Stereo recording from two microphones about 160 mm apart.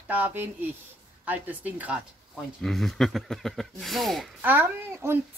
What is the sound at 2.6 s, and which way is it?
Speech, centre (ahead or behind).